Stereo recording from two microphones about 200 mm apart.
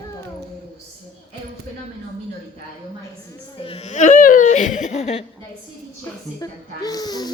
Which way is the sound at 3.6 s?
30° left (ahead or behind).